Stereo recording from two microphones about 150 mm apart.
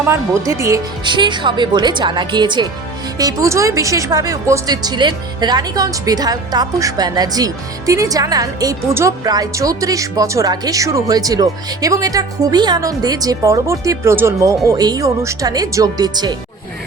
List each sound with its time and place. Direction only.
0.0 s speech: 15° right (ahead or behind)
1.0 s speech: 30° right (ahead or behind)